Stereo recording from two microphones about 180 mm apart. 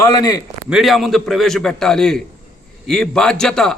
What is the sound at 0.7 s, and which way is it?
A man's voice, centre (ahead or behind).